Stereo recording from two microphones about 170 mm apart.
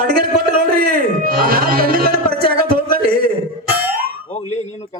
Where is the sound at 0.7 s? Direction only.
60° right (ahead or behind).